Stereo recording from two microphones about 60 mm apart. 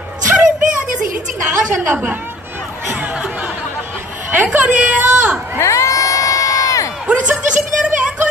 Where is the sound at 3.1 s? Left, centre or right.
Centre.